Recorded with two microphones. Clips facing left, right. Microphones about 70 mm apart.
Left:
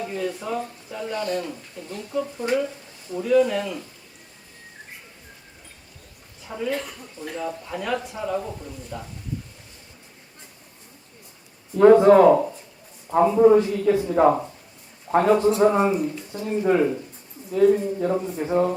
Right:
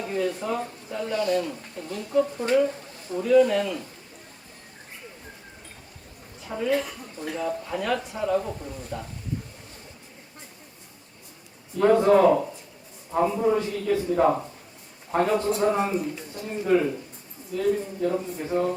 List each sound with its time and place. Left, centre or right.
0.0 s a sound: centre
0.4 s a man's voice: centre
1.1 s speech: left
3.2 s a man's voice: centre
6.5 s a man's voice: centre
11.8 s a man's voice: left